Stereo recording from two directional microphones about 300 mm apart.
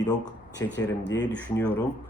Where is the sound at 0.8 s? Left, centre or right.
Left.